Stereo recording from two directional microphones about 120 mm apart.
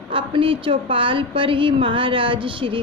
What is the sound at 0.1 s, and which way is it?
A woman's voice, 45° right (ahead or behind).